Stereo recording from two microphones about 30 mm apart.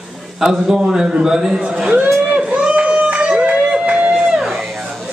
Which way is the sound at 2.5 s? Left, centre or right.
Right.